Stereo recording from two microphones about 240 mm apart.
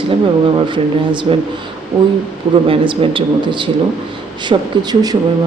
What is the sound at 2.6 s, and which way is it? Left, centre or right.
Speech, right.